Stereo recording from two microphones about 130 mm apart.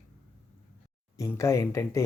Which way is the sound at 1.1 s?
20° left (ahead or behind).